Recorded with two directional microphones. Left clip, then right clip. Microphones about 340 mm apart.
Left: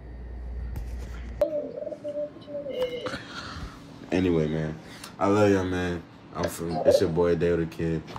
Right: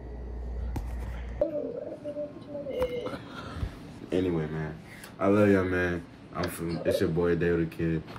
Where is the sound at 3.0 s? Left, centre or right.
Left.